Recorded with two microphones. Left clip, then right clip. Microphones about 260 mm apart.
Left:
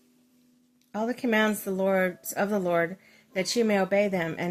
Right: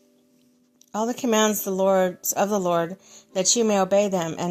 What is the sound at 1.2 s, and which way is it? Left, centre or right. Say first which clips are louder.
Speech: right 4 dB; centre.